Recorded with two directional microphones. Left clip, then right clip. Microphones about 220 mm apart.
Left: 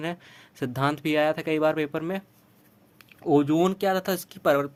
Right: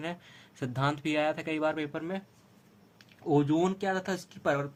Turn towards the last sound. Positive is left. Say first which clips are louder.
# left 7 dB
turn(degrees=50)  # may be behind; listen again after turning